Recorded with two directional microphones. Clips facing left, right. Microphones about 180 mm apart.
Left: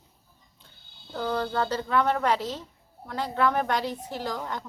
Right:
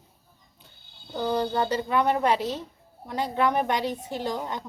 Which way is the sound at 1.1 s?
15° right (ahead or behind).